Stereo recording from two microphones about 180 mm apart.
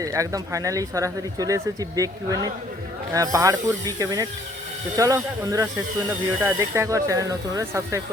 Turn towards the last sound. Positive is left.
turn(degrees=-15)  # may be behind; listen again after turning